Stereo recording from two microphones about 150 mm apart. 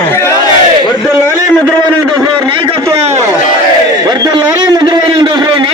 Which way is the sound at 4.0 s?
25° right (ahead or behind).